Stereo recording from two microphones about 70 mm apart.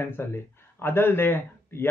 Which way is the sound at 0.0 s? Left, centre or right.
Left.